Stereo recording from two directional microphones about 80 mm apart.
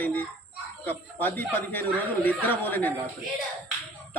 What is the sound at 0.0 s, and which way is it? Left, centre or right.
Speech, left.